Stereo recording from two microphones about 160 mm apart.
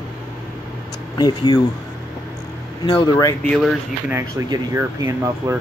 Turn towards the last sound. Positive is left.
turn(degrees=-20)  # may be behind; listen again after turning